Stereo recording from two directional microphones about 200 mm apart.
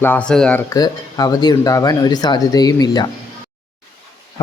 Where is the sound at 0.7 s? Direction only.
20° left (ahead or behind).